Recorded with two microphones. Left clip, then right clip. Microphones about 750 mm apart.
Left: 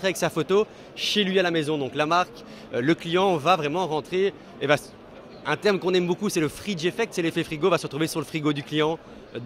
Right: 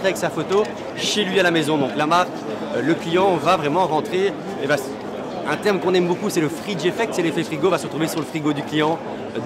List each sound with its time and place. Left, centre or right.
0.0 s a man's voice: left
2.9 s speech: left
5.5 s speech: left